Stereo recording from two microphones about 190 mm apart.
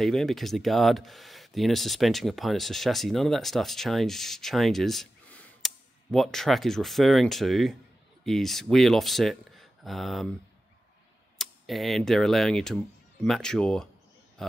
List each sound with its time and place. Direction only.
0.0 s speech: centre (ahead or behind)
11.3 s speech: centre (ahead or behind)